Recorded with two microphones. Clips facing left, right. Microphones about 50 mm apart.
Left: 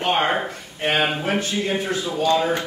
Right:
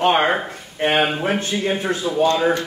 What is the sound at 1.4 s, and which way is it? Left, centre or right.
Speech, right.